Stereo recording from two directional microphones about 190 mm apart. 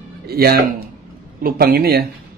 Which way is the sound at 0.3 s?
55° right (ahead or behind).